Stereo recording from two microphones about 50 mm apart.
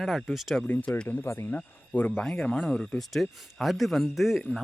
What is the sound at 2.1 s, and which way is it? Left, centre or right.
Speech, centre.